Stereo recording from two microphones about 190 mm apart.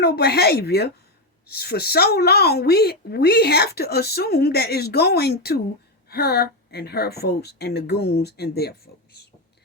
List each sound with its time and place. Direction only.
0.0 s a woman's voice: 55° left (ahead or behind)